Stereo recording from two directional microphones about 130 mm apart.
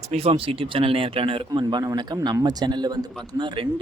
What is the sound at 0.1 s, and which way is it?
Speech, 50° right (ahead or behind).